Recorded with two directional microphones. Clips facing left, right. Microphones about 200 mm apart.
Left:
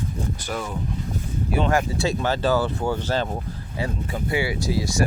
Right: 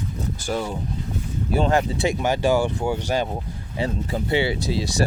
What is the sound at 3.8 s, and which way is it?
Speech, 25° right (ahead or behind).